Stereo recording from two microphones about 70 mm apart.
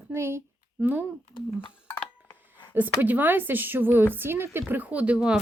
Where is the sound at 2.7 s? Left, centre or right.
Right.